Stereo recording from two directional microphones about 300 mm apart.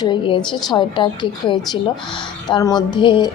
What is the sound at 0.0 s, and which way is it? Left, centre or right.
Speech, centre.